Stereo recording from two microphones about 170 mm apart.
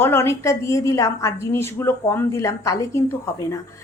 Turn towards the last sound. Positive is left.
turn(degrees=20)  # may be behind; listen again after turning